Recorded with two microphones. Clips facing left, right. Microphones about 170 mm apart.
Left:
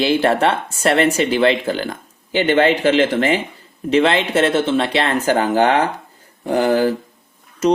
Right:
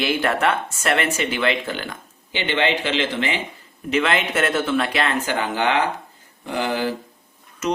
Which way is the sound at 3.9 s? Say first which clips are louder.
Left 6 dB; 30° left (ahead or behind).